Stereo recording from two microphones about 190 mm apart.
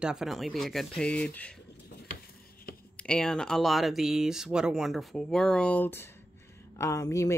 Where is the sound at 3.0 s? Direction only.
5° left (ahead or behind).